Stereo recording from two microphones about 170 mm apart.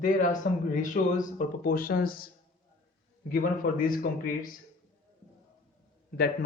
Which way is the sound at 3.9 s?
55° left (ahead or behind).